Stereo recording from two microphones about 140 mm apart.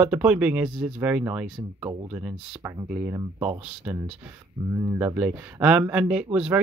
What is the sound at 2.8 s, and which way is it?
Speech, 30° right (ahead or behind).